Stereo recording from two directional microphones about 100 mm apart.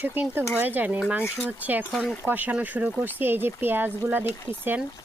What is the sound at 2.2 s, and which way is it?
Speech, 20° right (ahead or behind).